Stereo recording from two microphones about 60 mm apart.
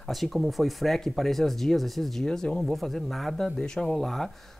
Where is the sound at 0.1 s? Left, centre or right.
Centre.